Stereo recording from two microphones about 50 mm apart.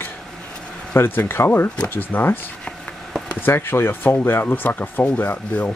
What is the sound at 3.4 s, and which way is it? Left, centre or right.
Speech, left.